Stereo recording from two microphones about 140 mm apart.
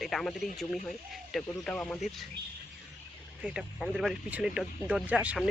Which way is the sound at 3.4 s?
5° right (ahead or behind).